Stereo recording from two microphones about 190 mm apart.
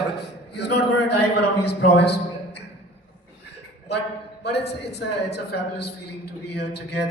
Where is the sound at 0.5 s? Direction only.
60° left (ahead or behind).